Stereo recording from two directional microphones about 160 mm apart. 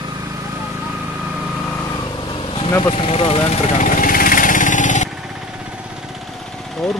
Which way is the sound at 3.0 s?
40° left (ahead or behind).